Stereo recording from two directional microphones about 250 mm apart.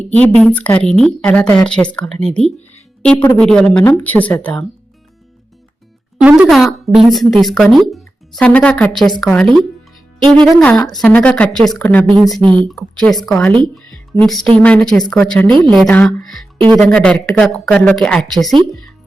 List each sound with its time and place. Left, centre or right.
0.0 s a woman's voice: centre
6.2 s a woman's voice: centre
12.4 s speech: centre
12.6 s a woman's voice: centre
14.1 s speech: centre
14.6 s a woman's voice: centre